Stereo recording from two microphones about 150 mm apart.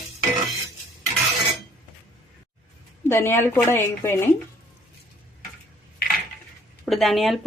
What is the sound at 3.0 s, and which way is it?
A woman's voice, 15° left (ahead or behind).